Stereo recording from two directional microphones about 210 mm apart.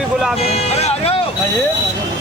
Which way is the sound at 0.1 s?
5° right (ahead or behind).